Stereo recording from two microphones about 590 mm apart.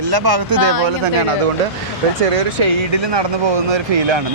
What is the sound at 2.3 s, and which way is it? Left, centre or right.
Speech, right.